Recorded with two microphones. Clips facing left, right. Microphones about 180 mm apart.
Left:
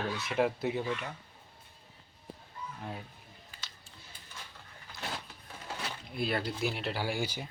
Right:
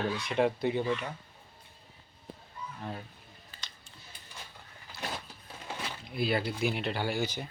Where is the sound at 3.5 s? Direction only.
10° left (ahead or behind).